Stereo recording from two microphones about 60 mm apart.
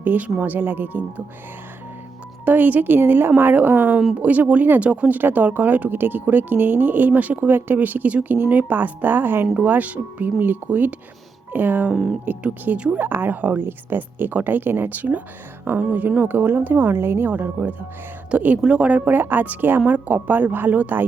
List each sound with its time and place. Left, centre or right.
0.0 s speech: right
2.4 s speech: right
13.0 s speech: right
17.3 s speech: right